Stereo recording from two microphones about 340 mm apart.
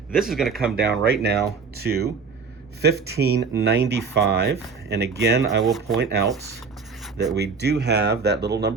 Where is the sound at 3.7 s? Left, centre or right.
Right.